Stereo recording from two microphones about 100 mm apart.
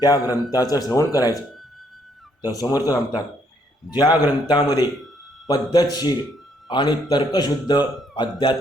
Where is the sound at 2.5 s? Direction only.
40° left (ahead or behind).